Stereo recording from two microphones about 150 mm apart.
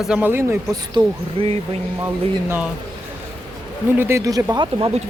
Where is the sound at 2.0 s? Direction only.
15° right (ahead or behind).